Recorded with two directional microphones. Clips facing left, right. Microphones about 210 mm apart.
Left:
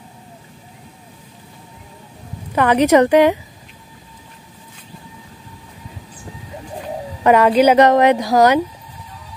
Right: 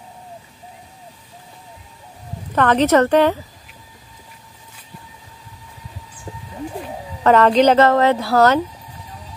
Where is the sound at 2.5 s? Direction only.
10° left (ahead or behind).